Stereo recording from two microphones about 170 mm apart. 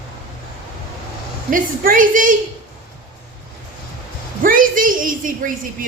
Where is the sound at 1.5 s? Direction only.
55° right (ahead or behind).